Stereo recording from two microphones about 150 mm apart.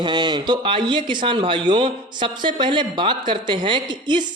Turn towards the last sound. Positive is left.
turn(degrees=-30)  # may be behind; listen again after turning